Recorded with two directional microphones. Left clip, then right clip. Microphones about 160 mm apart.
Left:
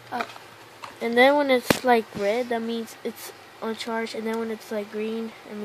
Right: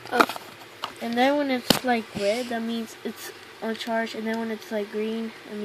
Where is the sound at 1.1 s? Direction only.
70° left (ahead or behind).